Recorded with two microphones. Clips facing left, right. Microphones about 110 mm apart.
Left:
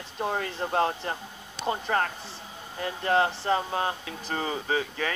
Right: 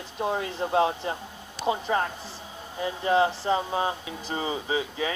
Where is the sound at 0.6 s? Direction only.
10° right (ahead or behind).